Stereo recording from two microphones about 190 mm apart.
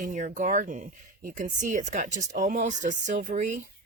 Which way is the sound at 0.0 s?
40° right (ahead or behind).